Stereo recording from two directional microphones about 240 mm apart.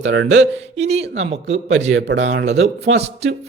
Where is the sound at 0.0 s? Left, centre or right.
Right.